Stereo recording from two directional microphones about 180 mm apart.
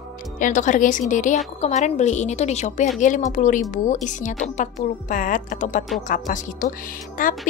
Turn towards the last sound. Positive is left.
turn(degrees=50)  # may be behind; listen again after turning